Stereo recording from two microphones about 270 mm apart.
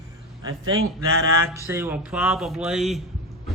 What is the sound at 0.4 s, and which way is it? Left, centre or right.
Speech, centre.